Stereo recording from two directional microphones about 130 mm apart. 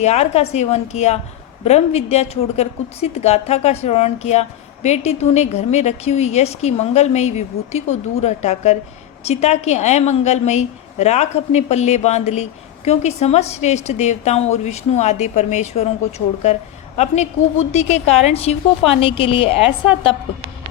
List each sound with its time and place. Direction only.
0.0 s a woman's voice: 55° left (ahead or behind)